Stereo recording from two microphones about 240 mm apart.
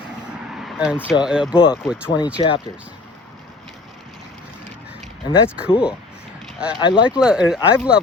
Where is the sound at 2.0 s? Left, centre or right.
Centre.